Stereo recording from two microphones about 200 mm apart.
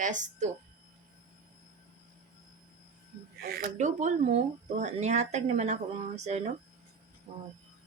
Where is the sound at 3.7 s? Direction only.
35° right (ahead or behind).